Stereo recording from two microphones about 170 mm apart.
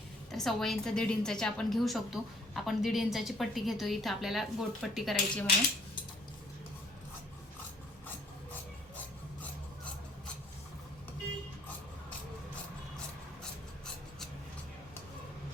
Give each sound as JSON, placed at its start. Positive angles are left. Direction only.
{"t": 0.3, "sound": "a woman's voice", "side_deg": 0}